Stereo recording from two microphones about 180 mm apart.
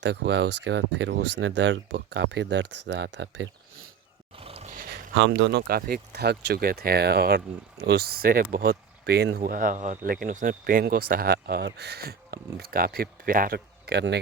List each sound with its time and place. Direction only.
0.0 s speech: 75° right (ahead or behind)
4.4 s roaring cats: 30° right (ahead or behind)
5.1 s speech: 80° right